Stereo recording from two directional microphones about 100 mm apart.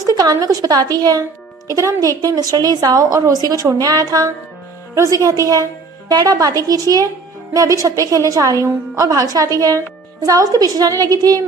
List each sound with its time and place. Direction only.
0.0 s a woman's voice: 40° right (ahead or behind)